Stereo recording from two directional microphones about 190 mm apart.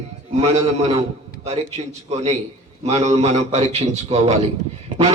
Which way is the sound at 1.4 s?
35° right (ahead or behind).